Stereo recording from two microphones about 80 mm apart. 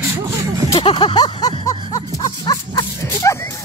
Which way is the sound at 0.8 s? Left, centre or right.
Left.